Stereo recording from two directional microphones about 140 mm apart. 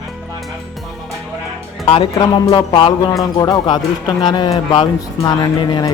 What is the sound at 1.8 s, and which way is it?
Speech, 40° left (ahead or behind).